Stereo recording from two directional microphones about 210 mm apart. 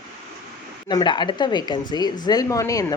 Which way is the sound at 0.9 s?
20° left (ahead or behind).